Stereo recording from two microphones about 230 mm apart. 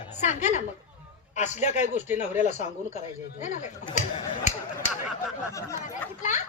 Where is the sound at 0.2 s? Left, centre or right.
Left.